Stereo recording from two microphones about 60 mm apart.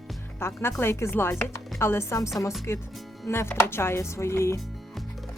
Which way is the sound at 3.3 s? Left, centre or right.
Left.